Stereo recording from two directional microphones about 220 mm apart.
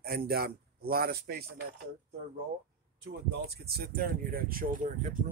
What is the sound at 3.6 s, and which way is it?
Speech, 45° right (ahead or behind).